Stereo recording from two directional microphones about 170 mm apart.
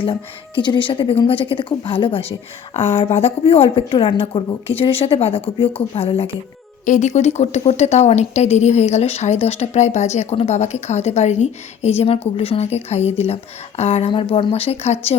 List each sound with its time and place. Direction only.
0.0 s speech: 30° left (ahead or behind)
6.8 s speech: 45° left (ahead or behind)